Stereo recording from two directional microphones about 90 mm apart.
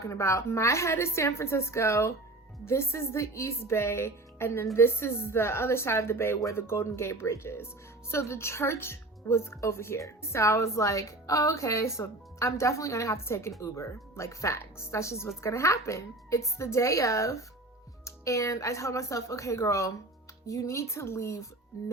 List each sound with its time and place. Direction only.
0.0 s a woman's voice: 35° left (ahead or behind)